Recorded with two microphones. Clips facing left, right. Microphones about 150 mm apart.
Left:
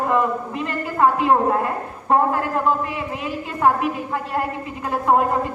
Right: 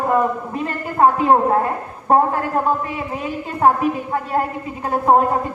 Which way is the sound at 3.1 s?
40° right (ahead or behind).